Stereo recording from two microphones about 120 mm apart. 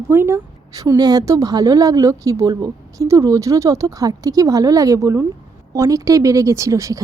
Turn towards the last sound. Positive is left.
turn(degrees=-25)  # may be behind; listen again after turning